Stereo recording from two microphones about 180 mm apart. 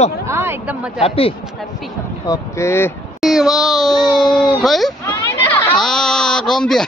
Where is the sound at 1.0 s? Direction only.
30° left (ahead or behind).